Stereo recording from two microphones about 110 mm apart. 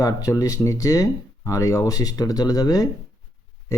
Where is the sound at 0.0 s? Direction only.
30° left (ahead or behind).